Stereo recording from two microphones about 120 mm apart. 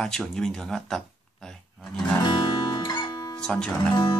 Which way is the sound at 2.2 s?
40° left (ahead or behind).